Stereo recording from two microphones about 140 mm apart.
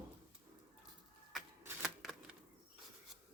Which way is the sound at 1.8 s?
Centre (ahead or behind).